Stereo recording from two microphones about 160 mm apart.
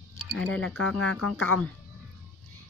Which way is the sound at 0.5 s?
5° left (ahead or behind).